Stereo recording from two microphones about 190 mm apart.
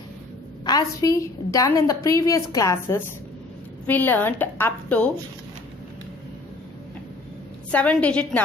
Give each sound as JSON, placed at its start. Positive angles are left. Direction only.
{"t": 0.7, "sound": "a woman's voice", "side_deg": 20}
{"t": 7.7, "sound": "a woman's voice", "side_deg": 5}